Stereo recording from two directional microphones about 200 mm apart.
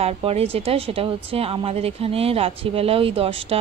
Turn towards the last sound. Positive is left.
turn(degrees=-30)  # may be behind; listen again after turning